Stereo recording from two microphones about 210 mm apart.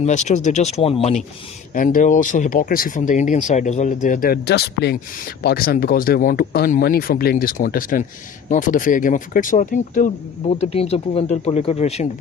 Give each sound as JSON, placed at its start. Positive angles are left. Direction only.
{"t": 0.0, "sound": "speech", "side_deg": 35}
{"t": 1.7, "sound": "speech", "side_deg": 40}